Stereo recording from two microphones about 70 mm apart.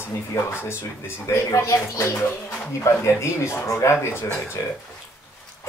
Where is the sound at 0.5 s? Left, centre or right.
Left.